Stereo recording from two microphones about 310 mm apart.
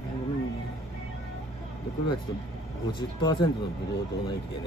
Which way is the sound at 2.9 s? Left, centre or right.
Centre.